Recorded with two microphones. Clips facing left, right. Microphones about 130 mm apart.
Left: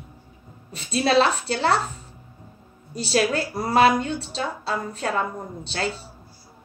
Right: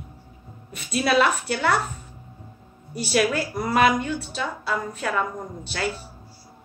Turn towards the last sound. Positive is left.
turn(degrees=30)  # may be behind; listen again after turning